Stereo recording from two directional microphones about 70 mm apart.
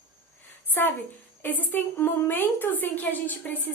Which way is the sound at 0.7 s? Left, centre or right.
Left.